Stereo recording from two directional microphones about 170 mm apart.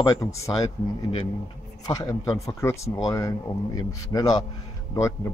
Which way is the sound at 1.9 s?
20° left (ahead or behind).